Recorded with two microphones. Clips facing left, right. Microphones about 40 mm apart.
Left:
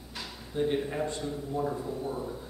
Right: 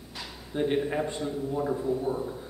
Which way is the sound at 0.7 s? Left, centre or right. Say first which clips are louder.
Right 3 dB; centre.